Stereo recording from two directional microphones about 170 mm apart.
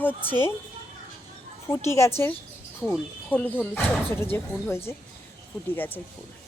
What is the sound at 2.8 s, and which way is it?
Speech, 5° left (ahead or behind).